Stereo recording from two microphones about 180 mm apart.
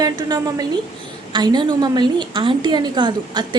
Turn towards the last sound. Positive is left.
turn(degrees=-25)  # may be behind; listen again after turning